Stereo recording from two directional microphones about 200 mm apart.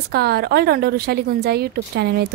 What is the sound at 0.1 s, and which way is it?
A woman's voice, 50° right (ahead or behind).